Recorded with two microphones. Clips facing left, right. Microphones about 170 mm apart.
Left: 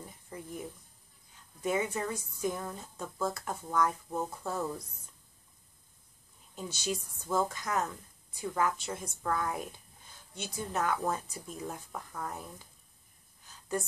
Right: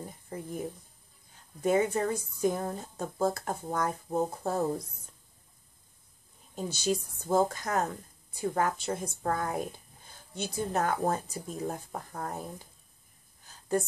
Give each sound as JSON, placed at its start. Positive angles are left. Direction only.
{"t": 0.0, "sound": "speech", "side_deg": -35}
{"t": 6.5, "sound": "speech", "side_deg": -35}